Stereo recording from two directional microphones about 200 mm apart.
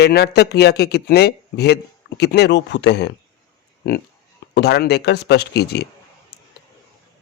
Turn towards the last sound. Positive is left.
turn(degrees=55)  # may be behind; listen again after turning